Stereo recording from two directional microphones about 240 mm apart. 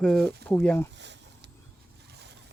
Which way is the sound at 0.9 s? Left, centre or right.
Right.